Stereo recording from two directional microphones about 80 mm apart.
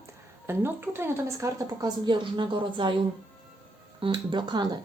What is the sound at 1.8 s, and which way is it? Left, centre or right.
A woman's voice, right.